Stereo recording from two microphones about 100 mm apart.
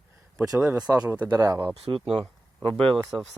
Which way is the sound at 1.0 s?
15° right (ahead or behind).